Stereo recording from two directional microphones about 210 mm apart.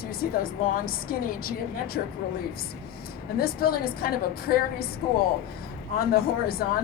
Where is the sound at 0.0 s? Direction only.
45° left (ahead or behind).